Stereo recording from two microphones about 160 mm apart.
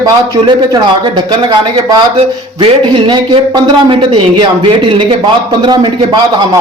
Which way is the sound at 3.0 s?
30° right (ahead or behind).